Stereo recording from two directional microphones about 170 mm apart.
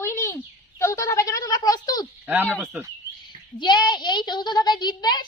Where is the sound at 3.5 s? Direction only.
25° left (ahead or behind).